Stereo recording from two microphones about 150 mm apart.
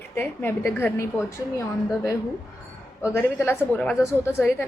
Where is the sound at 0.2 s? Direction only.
15° left (ahead or behind).